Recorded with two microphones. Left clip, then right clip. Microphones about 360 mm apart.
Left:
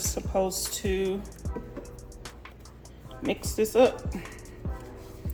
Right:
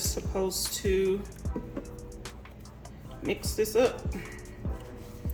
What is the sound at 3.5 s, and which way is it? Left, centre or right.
Speech, centre.